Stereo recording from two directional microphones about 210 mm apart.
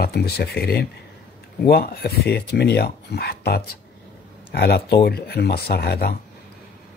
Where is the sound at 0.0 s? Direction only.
50° left (ahead or behind).